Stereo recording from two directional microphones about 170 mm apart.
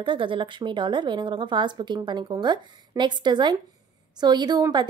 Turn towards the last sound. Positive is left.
turn(degrees=-25)  # may be behind; listen again after turning